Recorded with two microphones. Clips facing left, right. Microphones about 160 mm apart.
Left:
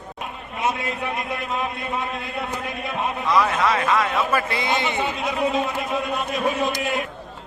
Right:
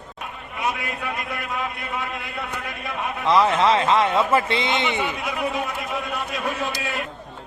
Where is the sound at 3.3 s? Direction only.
25° right (ahead or behind).